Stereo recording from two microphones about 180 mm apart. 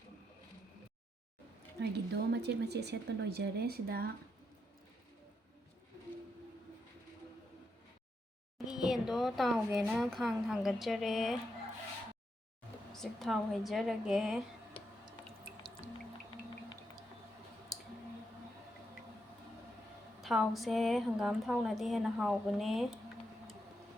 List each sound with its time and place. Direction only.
1.8 s speech: 65° right (ahead or behind)
8.5 s speech: centre (ahead or behind)
12.9 s a woman's voice: centre (ahead or behind)
14.8 s a sound: 30° left (ahead or behind)
20.2 s a woman's voice: centre (ahead or behind)